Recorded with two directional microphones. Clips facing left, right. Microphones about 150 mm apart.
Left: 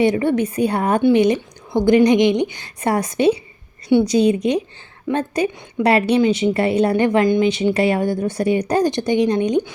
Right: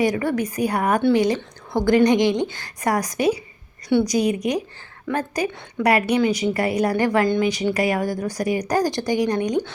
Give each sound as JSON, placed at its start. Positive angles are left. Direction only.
{"t": 0.0, "sound": "a woman's voice", "side_deg": 25}